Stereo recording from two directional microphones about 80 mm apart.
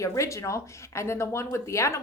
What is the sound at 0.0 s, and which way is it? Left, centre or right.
A woman's voice, left.